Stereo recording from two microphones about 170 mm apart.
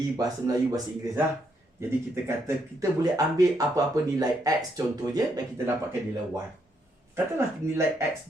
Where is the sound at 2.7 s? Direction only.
20° right (ahead or behind).